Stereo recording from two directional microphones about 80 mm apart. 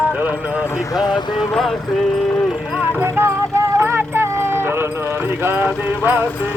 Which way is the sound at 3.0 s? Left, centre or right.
Right.